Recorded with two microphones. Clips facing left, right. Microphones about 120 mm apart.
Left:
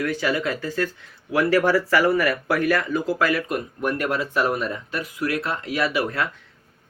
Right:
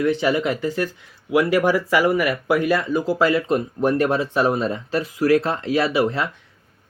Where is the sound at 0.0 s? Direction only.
20° right (ahead or behind).